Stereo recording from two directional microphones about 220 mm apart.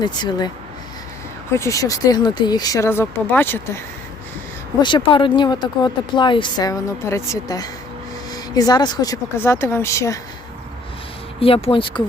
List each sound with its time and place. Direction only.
0.0 s speech: 20° left (ahead or behind)
1.5 s speech: 15° left (ahead or behind)
4.8 s speech: 20° left (ahead or behind)
11.3 s speech: 25° left (ahead or behind)